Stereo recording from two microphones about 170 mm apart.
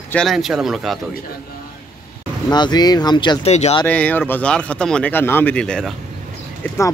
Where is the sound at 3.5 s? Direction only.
40° left (ahead or behind).